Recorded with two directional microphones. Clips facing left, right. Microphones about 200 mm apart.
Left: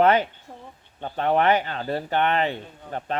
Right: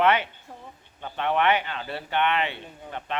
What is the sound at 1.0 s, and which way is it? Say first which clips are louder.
Speech: left 3 dB; 40° left (ahead or behind).